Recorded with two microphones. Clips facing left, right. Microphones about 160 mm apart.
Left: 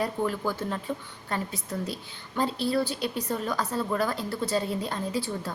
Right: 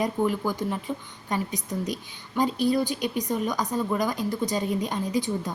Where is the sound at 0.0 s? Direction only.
15° right (ahead or behind).